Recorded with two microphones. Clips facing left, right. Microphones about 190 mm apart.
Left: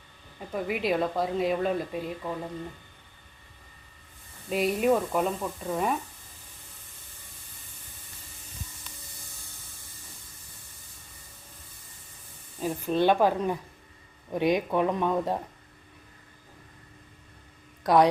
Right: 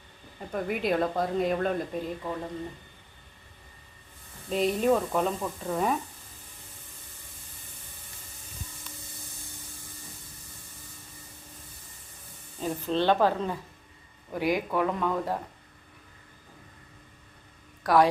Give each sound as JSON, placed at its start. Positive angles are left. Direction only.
{"t": 0.5, "sound": "speech", "side_deg": 0}
{"t": 4.4, "sound": "speech", "side_deg": 10}
{"t": 12.5, "sound": "speech", "side_deg": 10}
{"t": 17.8, "sound": "speech", "side_deg": 20}